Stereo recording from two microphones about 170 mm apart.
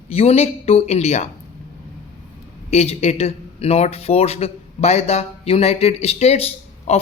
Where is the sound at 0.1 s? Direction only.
35° left (ahead or behind).